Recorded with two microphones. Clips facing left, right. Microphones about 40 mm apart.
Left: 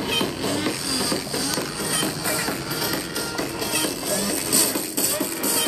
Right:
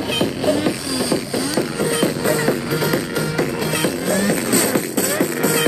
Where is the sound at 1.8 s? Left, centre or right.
Right.